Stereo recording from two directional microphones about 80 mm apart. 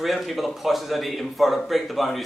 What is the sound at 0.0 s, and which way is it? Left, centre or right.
Speech, centre.